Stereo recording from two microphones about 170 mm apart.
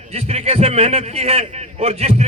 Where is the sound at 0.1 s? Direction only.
40° right (ahead or behind).